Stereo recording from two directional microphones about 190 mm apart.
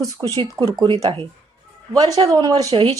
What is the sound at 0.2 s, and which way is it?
Speech, 10° right (ahead or behind).